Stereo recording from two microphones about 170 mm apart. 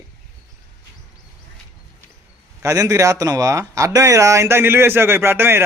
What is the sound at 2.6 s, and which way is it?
Speech, 20° right (ahead or behind).